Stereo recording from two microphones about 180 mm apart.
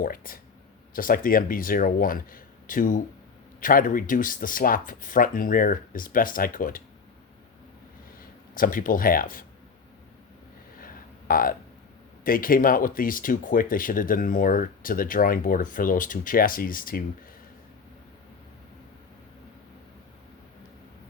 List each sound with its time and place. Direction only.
0.0 s speech: 50° left (ahead or behind)
8.5 s speech: 50° left (ahead or behind)
10.8 s a sound: 50° left (ahead or behind)
12.2 s speech: 50° left (ahead or behind)